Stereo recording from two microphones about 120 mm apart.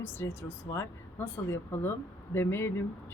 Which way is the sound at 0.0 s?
20° left (ahead or behind).